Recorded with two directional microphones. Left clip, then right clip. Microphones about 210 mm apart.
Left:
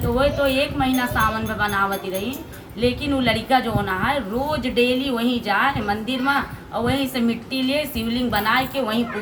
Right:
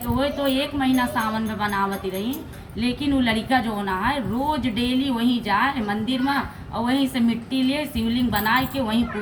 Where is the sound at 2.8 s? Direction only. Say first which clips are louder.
Left 2 dB; 20° left (ahead or behind).